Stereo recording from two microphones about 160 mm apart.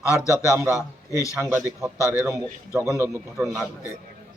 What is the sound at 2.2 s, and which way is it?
Speech, 20° right (ahead or behind).